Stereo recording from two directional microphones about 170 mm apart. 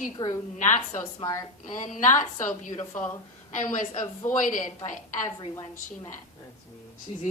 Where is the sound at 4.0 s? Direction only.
25° left (ahead or behind).